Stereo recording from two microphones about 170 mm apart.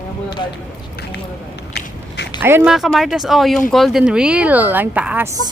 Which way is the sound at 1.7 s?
80° left.